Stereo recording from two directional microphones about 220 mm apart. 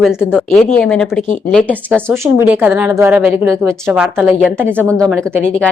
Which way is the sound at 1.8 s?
10° right (ahead or behind).